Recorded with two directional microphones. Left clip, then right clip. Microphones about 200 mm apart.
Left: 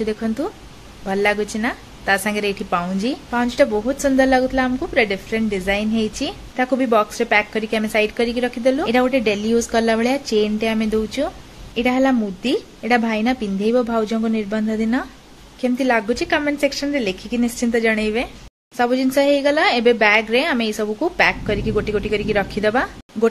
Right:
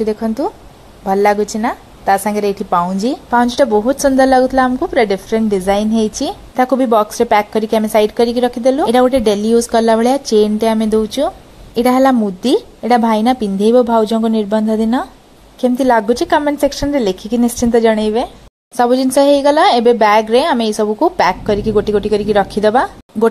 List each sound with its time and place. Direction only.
0.0 s a woman's voice: 15° right (ahead or behind)
3.3 s a woman's voice: 5° right (ahead or behind)
3.7 s a woman's voice: 20° right (ahead or behind)
4.9 s a woman's voice: centre (ahead or behind)
5.3 s a woman's voice: 25° right (ahead or behind)
16.5 s a woman's voice: 10° right (ahead or behind)
17.0 s a woman's voice: 25° right (ahead or behind)